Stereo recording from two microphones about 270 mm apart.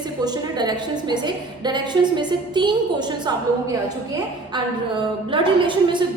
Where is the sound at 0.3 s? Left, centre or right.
Centre.